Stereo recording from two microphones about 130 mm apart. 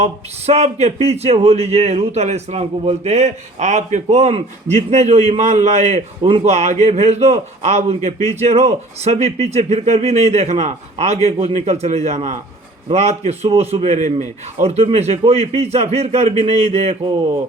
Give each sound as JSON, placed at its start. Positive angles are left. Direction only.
{"t": 0.0, "sound": "speech", "side_deg": -55}